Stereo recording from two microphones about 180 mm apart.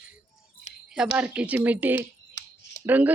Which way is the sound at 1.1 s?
5° right (ahead or behind).